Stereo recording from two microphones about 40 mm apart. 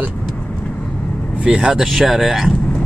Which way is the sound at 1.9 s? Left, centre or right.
Centre.